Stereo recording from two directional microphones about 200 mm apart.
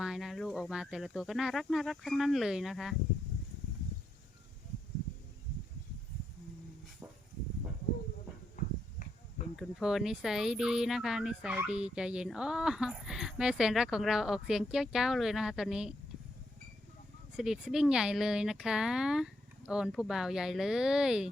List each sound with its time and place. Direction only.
0.0 s speech: centre (ahead or behind)
8.6 s a sound: 40° left (ahead or behind)
9.6 s speech: centre (ahead or behind)
17.3 s speech: centre (ahead or behind)